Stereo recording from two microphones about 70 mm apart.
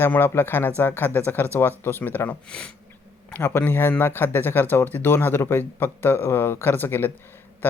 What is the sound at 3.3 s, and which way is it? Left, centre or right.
Speech, left.